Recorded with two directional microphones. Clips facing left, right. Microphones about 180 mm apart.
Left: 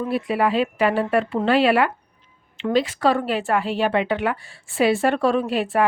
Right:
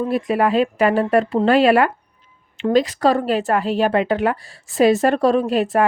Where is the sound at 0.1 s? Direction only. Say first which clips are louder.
Right 2 dB; 45° right (ahead or behind).